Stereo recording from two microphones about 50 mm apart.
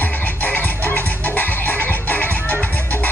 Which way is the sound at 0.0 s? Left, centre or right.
Left.